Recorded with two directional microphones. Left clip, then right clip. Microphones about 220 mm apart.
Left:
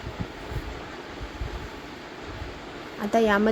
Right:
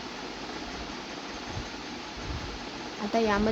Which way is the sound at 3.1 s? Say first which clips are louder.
Left 5 dB; 20° left (ahead or behind).